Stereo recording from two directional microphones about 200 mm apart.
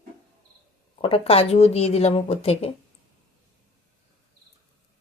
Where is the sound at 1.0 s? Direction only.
25° left (ahead or behind).